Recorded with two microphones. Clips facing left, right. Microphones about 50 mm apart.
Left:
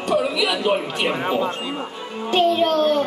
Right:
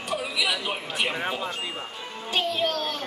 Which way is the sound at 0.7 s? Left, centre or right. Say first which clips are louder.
Left 7 dB; centre.